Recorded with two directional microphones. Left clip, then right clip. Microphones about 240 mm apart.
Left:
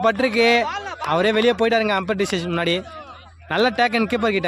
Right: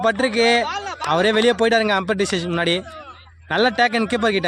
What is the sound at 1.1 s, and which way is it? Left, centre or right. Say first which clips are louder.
Speech: right 1 dB; centre.